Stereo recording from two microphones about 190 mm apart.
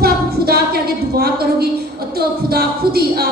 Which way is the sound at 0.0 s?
55° right (ahead or behind).